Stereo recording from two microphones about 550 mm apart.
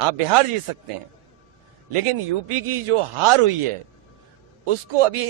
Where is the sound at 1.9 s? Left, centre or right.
Right.